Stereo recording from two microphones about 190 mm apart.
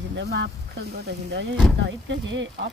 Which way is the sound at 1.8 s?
75° right (ahead or behind).